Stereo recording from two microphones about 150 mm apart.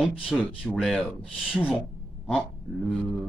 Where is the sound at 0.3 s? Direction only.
5° left (ahead or behind).